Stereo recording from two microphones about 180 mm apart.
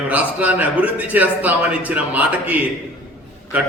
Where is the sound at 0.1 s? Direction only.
10° right (ahead or behind).